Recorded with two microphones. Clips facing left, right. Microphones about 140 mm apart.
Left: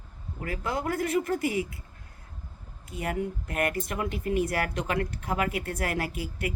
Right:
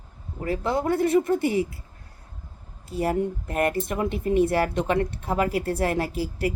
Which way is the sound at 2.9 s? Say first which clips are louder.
Right 6 dB; 35° right (ahead or behind).